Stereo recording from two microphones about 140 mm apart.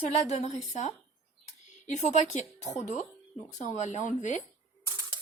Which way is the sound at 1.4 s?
55° left (ahead or behind).